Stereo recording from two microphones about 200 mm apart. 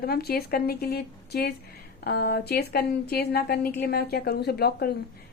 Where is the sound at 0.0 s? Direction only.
50° left (ahead or behind).